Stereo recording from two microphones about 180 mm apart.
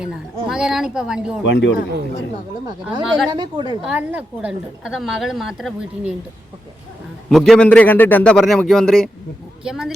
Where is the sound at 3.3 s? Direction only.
25° right (ahead or behind).